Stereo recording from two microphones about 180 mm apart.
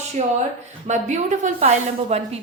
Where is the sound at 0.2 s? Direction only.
40° right (ahead or behind).